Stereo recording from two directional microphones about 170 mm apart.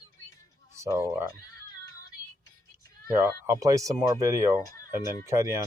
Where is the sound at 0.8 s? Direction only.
20° right (ahead or behind).